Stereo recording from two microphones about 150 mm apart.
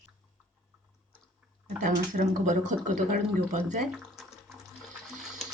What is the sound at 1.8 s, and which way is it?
Speech, 60° right (ahead or behind).